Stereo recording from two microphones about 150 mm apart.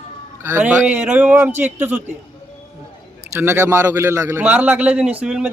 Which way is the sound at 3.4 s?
15° right (ahead or behind).